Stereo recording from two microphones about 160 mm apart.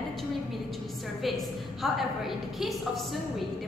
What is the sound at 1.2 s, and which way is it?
A woman's voice, centre (ahead or behind).